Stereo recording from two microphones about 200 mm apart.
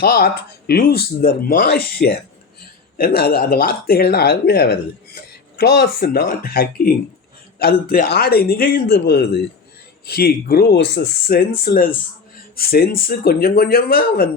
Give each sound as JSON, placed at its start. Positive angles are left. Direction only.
{"t": 0.0, "sound": "speech", "side_deg": 50}